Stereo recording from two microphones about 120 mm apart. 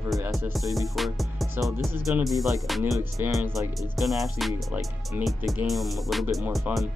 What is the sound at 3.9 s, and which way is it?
Music, centre (ahead or behind).